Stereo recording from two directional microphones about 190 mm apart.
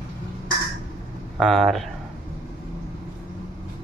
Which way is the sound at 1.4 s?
Centre (ahead or behind).